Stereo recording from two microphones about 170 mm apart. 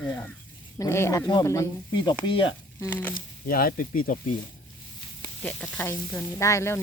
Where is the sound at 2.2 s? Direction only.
30° left (ahead or behind).